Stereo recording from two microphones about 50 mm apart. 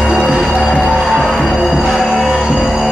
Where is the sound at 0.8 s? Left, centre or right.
Centre.